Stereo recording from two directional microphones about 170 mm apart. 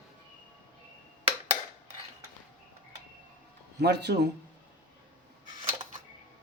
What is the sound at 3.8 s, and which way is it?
Speech, 80° right.